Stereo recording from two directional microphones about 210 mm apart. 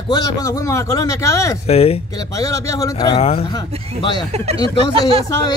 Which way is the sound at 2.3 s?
15° left (ahead or behind).